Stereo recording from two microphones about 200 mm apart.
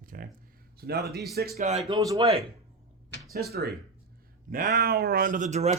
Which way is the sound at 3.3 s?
50° right (ahead or behind).